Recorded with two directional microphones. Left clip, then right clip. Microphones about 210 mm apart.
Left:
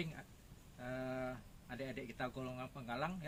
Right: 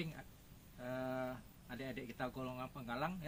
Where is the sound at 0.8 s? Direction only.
10° left (ahead or behind).